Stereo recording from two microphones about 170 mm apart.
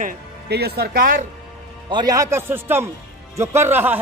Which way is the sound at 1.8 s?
25° right (ahead or behind).